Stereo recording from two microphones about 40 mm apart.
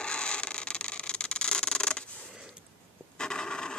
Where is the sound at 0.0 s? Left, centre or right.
Left.